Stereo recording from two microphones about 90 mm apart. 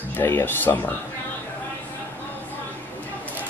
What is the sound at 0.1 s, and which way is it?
Speech, 20° left (ahead or behind).